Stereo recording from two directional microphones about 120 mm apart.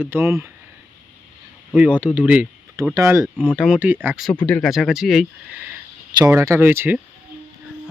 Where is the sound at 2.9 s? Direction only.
25° right (ahead or behind).